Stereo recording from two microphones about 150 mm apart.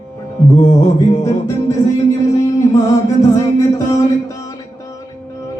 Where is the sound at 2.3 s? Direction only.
20° left (ahead or behind).